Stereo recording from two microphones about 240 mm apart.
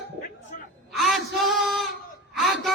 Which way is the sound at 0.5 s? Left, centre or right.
Left.